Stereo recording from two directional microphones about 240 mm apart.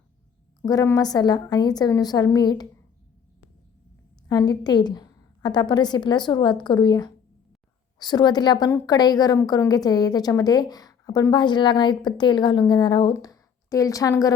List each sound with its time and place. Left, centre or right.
0.6 s a woman's voice: centre
4.3 s a woman's voice: centre